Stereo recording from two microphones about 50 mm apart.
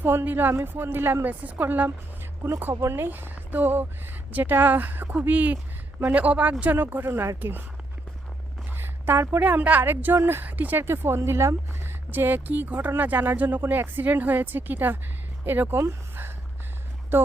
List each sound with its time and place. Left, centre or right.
0.0 s speech: right
1.3 s a woman's voice: right
2.6 s speech: right
3.1 s a woman's voice: right
6.7 s a woman's voice: right
7.1 s speech: right
8.7 s a sound: right
9.4 s a woman's voice: right
10.8 s speech: right
11.2 s speech: right
12.1 s a woman's voice: right
17.1 s speech: right